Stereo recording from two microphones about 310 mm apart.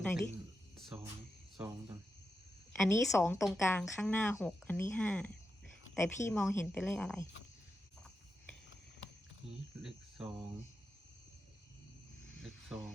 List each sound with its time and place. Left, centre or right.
2.7 s speech: centre
9.8 s speech: centre
12.4 s a sound: centre